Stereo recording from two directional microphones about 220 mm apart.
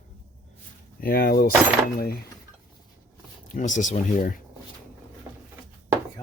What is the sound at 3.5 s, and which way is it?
Speech, 35° left (ahead or behind).